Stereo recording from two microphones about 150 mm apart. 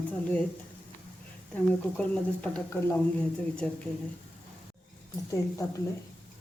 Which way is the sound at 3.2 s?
10° left (ahead or behind).